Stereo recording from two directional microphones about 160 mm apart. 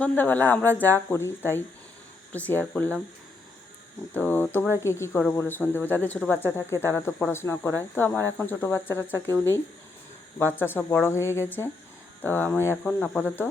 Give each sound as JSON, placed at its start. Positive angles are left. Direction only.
{"t": 0.0, "sound": "speech", "side_deg": 10}
{"t": 4.1, "sound": "speech", "side_deg": 10}
{"t": 10.6, "sound": "speech", "side_deg": 15}